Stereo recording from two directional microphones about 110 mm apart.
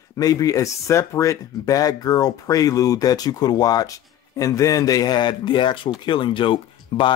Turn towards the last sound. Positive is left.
turn(degrees=50)  # may be behind; listen again after turning